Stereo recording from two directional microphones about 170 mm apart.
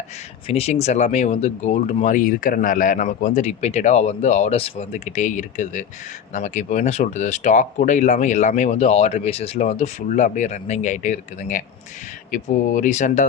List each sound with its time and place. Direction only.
0.4 s speech: 35° left (ahead or behind)